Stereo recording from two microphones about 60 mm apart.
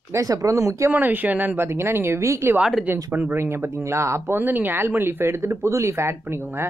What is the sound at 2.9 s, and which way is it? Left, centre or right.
Speech, right.